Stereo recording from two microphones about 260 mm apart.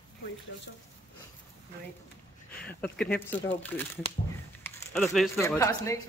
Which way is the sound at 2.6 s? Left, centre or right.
Centre.